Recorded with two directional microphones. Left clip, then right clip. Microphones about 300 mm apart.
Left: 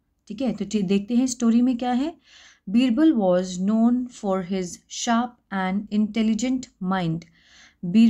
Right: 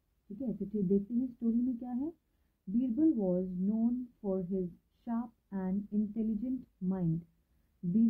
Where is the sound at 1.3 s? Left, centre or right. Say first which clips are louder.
Left 13 dB; centre.